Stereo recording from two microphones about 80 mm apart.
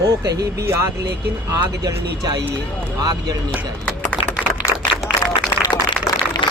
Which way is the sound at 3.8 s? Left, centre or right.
Centre.